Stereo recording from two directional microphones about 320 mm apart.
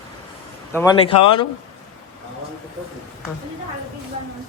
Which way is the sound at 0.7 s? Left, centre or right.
Centre.